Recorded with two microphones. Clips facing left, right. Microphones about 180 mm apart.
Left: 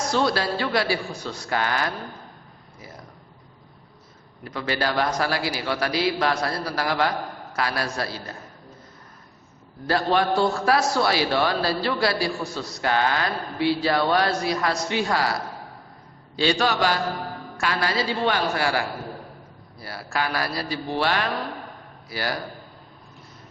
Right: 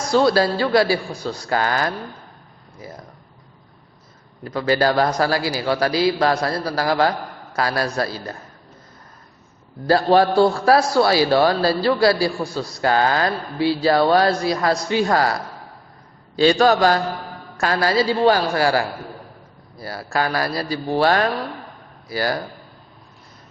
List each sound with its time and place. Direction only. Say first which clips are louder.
0.1 s a man's voice: right 8 dB; 35° right (ahead or behind)
4.4 s a man's voice: right 8 dB; 40° right (ahead or behind)
9.8 s a man's voice: right 6 dB; 35° right (ahead or behind)
16.3 s a man's voice: right 7 dB; 45° right (ahead or behind)
19.8 s a man's voice: right 5 dB; 40° right (ahead or behind)